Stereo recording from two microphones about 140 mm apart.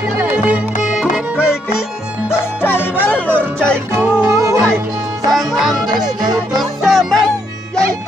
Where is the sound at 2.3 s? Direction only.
15° left (ahead or behind).